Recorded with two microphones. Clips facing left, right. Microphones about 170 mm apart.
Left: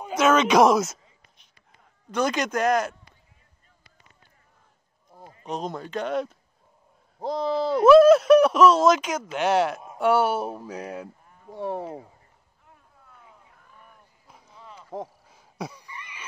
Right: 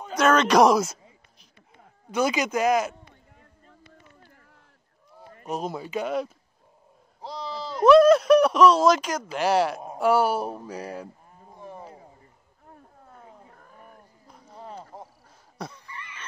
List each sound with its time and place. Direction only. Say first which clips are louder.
0.0 s speech: left 1 dB; centre (ahead or behind)
2.0 s speech: right 1 dB; 5° right (ahead or behind)
5.5 s speech: right 1 dB; 5° right (ahead or behind)
7.2 s speech: left 10 dB; 50° left (ahead or behind)
7.8 s speech: left 1 dB; centre (ahead or behind)
11.5 s speech: left 11 dB; 80° left
12.6 s a sound: right 7 dB; 40° right (ahead or behind)
15.5 s a sound: left 2 dB; 5° left (ahead or behind)